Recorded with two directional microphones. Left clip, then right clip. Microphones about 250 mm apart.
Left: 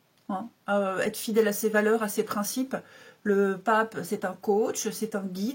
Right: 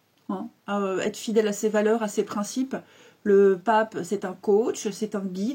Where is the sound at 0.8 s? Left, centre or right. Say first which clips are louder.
Right 1 dB; centre.